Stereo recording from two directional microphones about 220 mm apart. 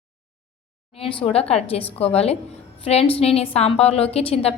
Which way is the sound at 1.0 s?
25° left (ahead or behind).